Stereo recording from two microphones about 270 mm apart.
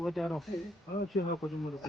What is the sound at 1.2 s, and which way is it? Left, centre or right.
Speech, left.